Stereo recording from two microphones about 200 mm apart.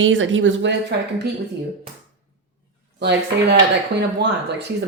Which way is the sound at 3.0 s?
55° right (ahead or behind).